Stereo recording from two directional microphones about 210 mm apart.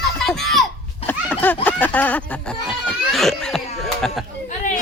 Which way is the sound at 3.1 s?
Centre (ahead or behind).